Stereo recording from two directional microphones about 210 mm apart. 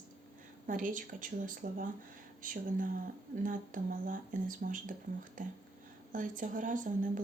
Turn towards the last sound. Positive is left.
turn(degrees=-40)  # may be behind; listen again after turning